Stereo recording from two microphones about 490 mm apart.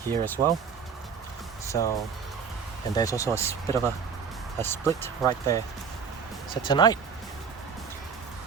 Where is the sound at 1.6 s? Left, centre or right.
Centre.